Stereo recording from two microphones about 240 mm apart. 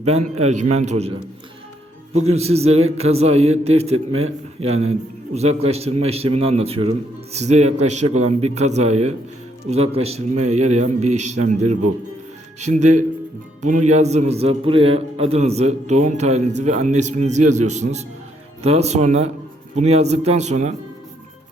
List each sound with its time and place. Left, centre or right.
0.0 s a man's voice: right
2.1 s a man's voice: right